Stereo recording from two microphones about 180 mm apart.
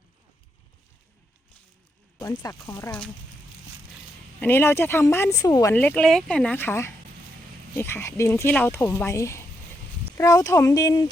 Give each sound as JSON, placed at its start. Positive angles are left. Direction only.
{"t": 2.2, "sound": "speech", "side_deg": 20}
{"t": 4.4, "sound": "speech", "side_deg": 10}
{"t": 5.7, "sound": "speech", "side_deg": 5}